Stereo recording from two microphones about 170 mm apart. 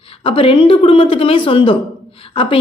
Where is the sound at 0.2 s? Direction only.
30° left (ahead or behind).